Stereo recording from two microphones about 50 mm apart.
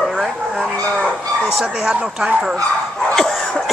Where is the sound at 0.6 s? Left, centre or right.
Right.